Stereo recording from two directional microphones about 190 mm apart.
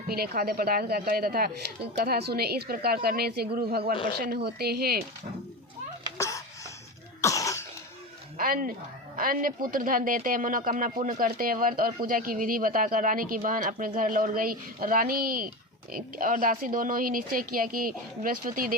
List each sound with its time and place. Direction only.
0.1 s a woman's voice: 55° right (ahead or behind)
3.9 s speech: 25° left (ahead or behind)
4.2 s speech: 55° right (ahead or behind)
6.1 s a sound: 15° left (ahead or behind)
7.2 s cough: 15° left (ahead or behind)
8.4 s speech: 45° right (ahead or behind)